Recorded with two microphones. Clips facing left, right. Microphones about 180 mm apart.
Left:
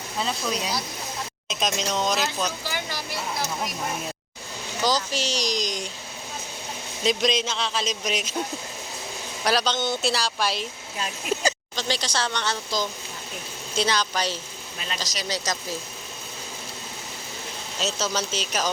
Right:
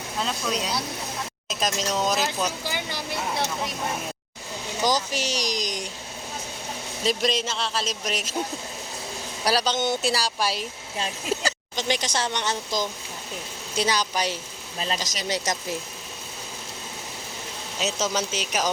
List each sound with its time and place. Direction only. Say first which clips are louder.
0.2 s speech: even; 5° left (ahead or behind)
2.6 s a sound: right 1 dB; 20° right (ahead or behind)
4.8 s speech: even; 15° right (ahead or behind)
7.0 s speech: left 1 dB; 5° right (ahead or behind)
9.4 s speech: even; 10° right (ahead or behind)
11.8 s speech: right 2 dB; 20° right (ahead or behind)
15.1 s speech: left 1 dB; 50° right (ahead or behind)
17.7 s speech: right 1 dB; 15° right (ahead or behind)